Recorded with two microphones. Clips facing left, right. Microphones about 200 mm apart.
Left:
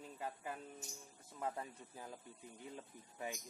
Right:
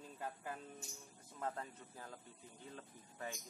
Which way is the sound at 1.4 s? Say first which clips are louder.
Left 1 dB; 10° left (ahead or behind).